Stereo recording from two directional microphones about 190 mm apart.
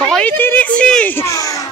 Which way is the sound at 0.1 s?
10° left (ahead or behind).